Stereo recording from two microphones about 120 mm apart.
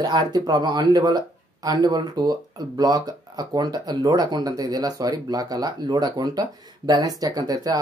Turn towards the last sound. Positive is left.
turn(degrees=-30)  # may be behind; listen again after turning